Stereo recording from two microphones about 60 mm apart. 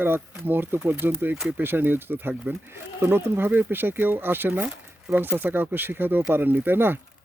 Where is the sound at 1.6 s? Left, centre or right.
Right.